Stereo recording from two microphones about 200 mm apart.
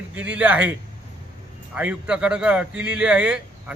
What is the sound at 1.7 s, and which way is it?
Speech, 5° right (ahead or behind).